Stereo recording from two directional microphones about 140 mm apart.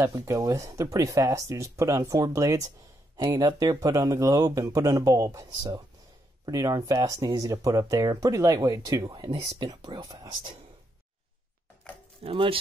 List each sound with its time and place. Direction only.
0.3 s speech: 20° right (ahead or behind)
9.3 s speech: 40° right (ahead or behind)
12.2 s speech: 40° right (ahead or behind)